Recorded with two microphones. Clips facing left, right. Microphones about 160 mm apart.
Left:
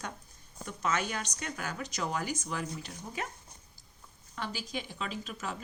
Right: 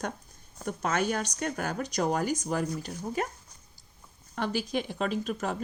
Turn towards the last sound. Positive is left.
turn(degrees=-50)  # may be behind; listen again after turning